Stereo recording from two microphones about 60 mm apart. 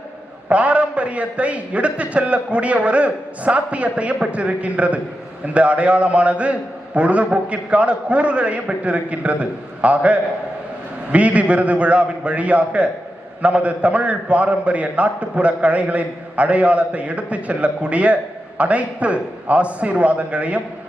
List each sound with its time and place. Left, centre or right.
0.4 s a man's voice: right